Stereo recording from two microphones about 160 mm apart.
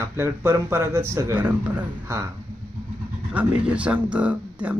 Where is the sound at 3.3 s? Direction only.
10° right (ahead or behind).